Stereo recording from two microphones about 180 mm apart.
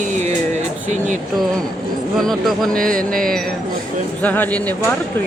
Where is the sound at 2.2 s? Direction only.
Centre (ahead or behind).